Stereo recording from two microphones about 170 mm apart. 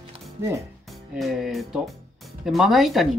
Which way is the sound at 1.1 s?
Centre (ahead or behind).